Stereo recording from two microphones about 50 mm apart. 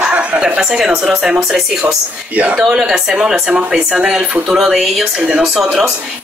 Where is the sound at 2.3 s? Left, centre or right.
Right.